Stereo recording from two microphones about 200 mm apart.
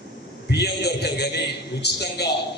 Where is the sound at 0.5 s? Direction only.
55° left (ahead or behind).